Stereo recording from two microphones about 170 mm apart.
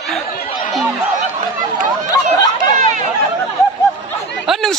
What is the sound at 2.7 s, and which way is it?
Chatter, 45° right (ahead or behind).